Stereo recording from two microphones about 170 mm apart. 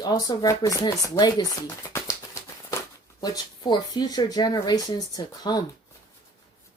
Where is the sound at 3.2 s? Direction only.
25° left (ahead or behind).